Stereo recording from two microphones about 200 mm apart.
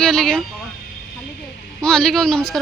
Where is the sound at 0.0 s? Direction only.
Centre (ahead or behind).